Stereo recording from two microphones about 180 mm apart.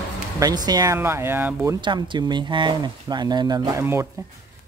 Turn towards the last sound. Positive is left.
turn(degrees=-15)  # may be behind; listen again after turning